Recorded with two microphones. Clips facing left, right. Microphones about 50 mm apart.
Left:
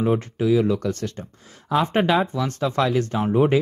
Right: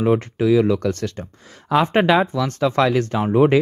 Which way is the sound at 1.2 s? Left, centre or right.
Right.